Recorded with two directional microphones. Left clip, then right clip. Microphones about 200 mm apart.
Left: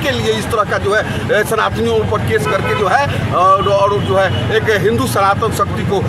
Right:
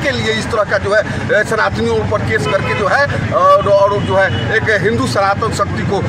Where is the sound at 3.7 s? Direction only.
5° left (ahead or behind).